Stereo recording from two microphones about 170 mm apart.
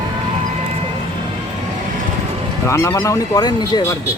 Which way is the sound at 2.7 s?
15° left (ahead or behind).